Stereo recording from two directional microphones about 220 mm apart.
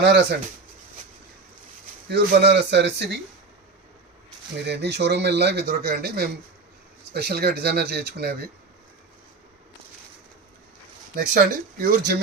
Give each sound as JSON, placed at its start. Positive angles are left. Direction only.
{"t": 0.0, "sound": "speech", "side_deg": -50}
{"t": 2.0, "sound": "speech", "side_deg": -50}
{"t": 4.6, "sound": "speech", "side_deg": -50}
{"t": 11.1, "sound": "speech", "side_deg": -40}